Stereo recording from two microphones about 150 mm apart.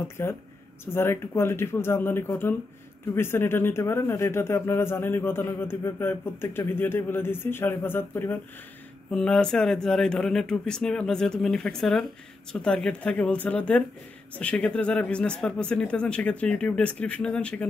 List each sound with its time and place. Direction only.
0.2 s a man's voice: 15° left (ahead or behind)